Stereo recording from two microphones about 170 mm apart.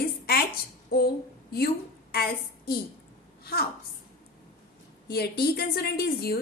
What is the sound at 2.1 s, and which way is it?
A woman's voice, 65° left (ahead or behind).